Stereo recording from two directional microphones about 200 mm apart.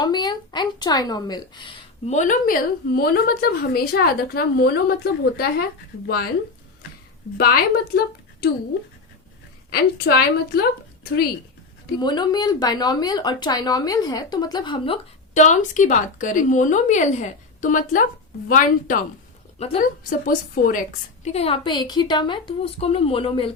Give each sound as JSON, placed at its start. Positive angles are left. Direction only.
{"t": 0.0, "sound": "speech", "side_deg": 20}
{"t": 2.0, "sound": "a woman's voice", "side_deg": 40}
{"t": 7.3, "sound": "a woman's voice", "side_deg": 50}
{"t": 9.6, "sound": "a woman's voice", "side_deg": 50}
{"t": 11.9, "sound": "speech", "side_deg": 20}
{"t": 15.4, "sound": "a woman's voice", "side_deg": 40}
{"t": 19.5, "sound": "a woman's voice", "side_deg": 30}
{"t": 20.1, "sound": "a woman's voice", "side_deg": 45}
{"t": 21.2, "sound": "speech", "side_deg": 30}